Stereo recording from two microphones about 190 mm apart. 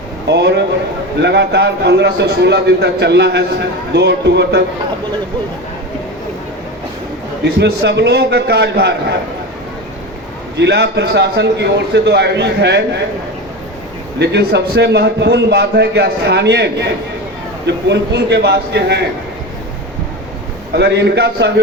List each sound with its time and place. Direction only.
0.3 s a man's voice: 65° right (ahead or behind)
7.4 s a man's voice: 60° right (ahead or behind)
10.6 s a man's voice: 65° right (ahead or behind)
14.2 s a man's voice: 65° right (ahead or behind)
20.7 s a man's voice: 65° right (ahead or behind)